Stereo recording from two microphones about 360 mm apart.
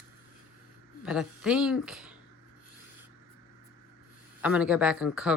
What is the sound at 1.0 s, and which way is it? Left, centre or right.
Speech, centre.